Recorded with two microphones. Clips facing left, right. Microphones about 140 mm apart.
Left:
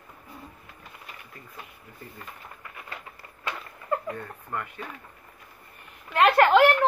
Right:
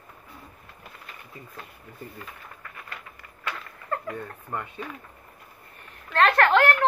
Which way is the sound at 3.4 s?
20° left (ahead or behind).